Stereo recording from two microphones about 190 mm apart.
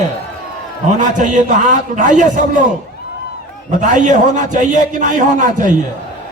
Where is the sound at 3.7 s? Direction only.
40° right (ahead or behind).